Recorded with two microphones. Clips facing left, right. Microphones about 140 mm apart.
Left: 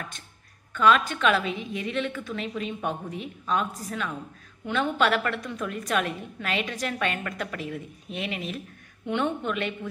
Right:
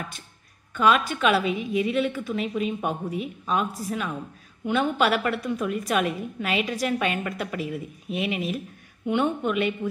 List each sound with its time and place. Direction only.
0.7 s a woman's voice: 10° right (ahead or behind)